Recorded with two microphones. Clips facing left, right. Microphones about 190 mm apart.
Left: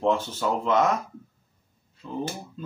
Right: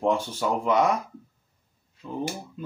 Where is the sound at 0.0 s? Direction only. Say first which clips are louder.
Even; 10° right (ahead or behind).